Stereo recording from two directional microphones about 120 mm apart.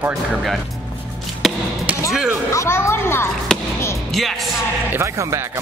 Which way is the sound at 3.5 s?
5° left (ahead or behind).